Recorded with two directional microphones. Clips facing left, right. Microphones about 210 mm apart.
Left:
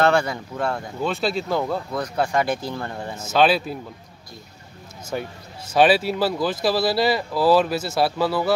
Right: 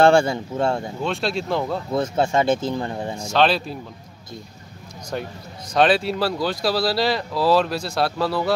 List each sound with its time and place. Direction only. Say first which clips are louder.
0.0 s speech: right 4 dB; 30° right (ahead or behind)
1.0 s speech: left 2 dB; centre (ahead or behind)
1.9 s speech: right 3 dB; 25° right (ahead or behind)
3.2 s speech: left 1 dB; 5° left (ahead or behind)
5.1 s speech: even; 5° left (ahead or behind)